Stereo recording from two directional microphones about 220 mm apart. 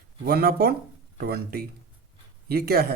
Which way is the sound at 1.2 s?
45° right (ahead or behind).